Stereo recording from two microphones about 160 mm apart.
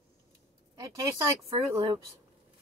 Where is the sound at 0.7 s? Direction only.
20° right (ahead or behind).